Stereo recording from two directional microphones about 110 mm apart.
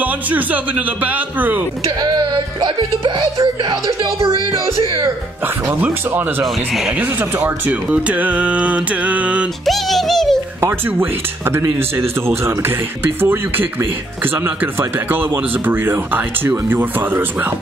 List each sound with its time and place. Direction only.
0.0 s speech: 15° right (ahead or behind)
2.0 s speech: 40° right (ahead or behind)
4.3 s speech: 50° right (ahead or behind)
5.8 s speech: 15° right (ahead or behind)
6.4 s speech: centre (ahead or behind)
7.3 s speech: 20° right (ahead or behind)
9.7 s speech: centre (ahead or behind)
10.6 s speech: 20° right (ahead or behind)